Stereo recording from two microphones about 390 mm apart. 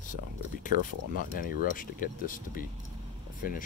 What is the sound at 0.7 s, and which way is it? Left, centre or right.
Speech, left.